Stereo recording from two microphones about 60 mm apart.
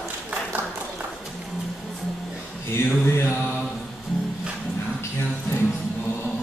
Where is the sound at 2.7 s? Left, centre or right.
Left.